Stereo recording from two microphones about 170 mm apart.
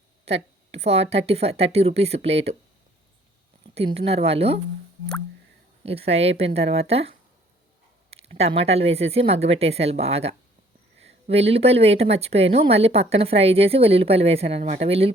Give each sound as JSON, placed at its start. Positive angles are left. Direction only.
{"t": 0.3, "sound": "a woman's voice", "side_deg": -40}
{"t": 3.8, "sound": "a woman's voice", "side_deg": -35}
{"t": 5.8, "sound": "a woman's voice", "side_deg": -35}
{"t": 8.1, "sound": "a woman's voice", "side_deg": -35}